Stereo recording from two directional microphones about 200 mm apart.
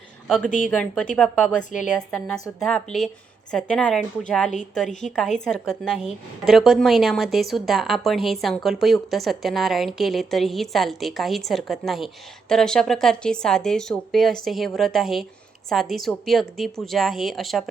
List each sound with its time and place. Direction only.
0.3 s a woman's voice: centre (ahead or behind)
4.9 s a woman's voice: 40° left (ahead or behind)
5.1 s a woman's voice: centre (ahead or behind)